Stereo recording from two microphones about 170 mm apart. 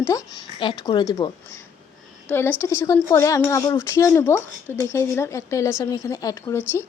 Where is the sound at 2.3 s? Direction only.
15° left (ahead or behind).